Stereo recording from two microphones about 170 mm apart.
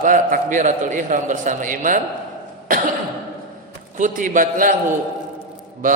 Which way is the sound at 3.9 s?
50° right (ahead or behind).